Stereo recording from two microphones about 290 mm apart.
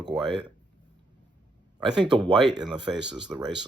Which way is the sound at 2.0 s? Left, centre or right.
Centre.